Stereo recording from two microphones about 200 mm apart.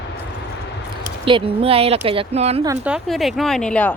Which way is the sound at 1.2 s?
25° right (ahead or behind).